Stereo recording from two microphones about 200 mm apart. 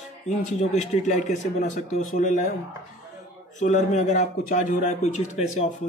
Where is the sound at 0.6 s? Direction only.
35° left (ahead or behind).